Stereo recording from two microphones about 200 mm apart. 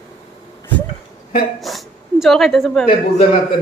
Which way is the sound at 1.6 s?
Centre (ahead or behind).